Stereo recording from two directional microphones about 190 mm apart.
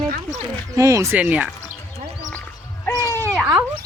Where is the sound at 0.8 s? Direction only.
15° right (ahead or behind).